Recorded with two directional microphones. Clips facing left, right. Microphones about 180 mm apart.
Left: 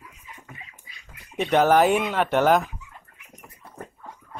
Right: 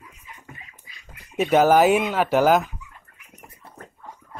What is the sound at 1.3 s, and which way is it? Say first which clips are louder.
Speech: right 2 dB; 5° right (ahead or behind).